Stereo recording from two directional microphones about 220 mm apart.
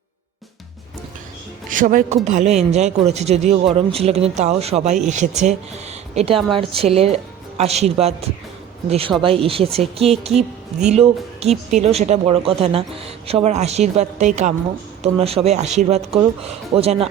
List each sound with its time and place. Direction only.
1.7 s a man's voice: 40° right (ahead or behind)